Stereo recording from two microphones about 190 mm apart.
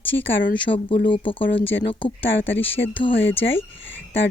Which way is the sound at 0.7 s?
35° left (ahead or behind).